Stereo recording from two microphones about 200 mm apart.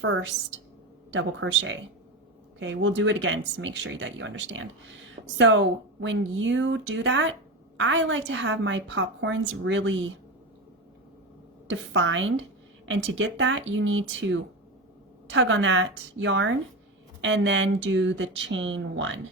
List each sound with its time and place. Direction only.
0.0 s a woman's voice: 70° right (ahead or behind)
11.7 s a woman's voice: 70° right (ahead or behind)